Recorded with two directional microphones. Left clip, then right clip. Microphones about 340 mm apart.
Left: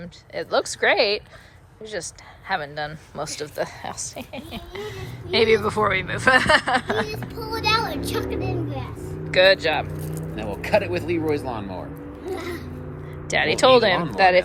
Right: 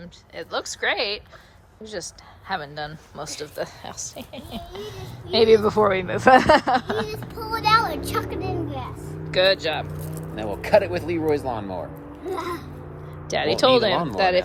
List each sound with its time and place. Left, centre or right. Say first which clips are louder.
0.0 s speech: left 5 dB; centre
7.8 s speech: right 2 dB; centre
8.1 s speech: even; centre
10.0 s speech: even; right
13.2 s speech: left 2 dB; centre